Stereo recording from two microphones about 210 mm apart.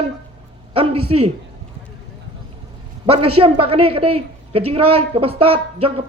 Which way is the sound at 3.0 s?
25° right (ahead or behind).